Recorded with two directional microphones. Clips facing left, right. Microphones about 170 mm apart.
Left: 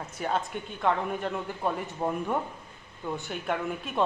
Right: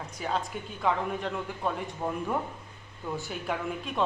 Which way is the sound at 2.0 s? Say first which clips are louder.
Left 3 dB; 15° left (ahead or behind).